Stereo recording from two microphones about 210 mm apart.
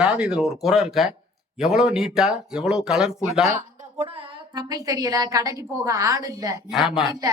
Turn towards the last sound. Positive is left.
turn(degrees=0)  # may be behind; listen again after turning